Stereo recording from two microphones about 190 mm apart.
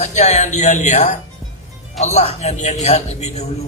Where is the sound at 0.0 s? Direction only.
35° left (ahead or behind).